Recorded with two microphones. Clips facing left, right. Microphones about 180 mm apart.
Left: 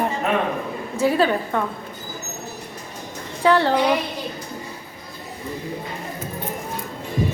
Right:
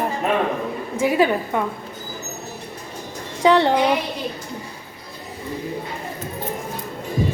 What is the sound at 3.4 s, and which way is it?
Speech, 20° right (ahead or behind).